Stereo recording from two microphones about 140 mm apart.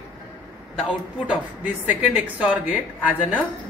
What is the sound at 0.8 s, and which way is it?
Speech, 10° right (ahead or behind).